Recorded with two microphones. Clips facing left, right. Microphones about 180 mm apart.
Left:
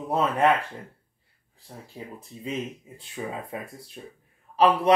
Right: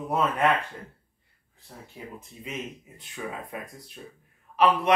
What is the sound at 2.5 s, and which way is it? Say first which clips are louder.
Speech: left 5 dB; 30° left (ahead or behind).